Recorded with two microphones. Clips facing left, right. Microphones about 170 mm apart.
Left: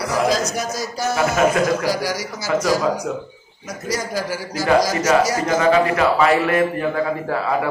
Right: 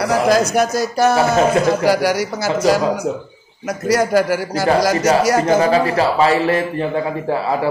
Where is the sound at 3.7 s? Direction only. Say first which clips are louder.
Right 9 dB; 65° right (ahead or behind).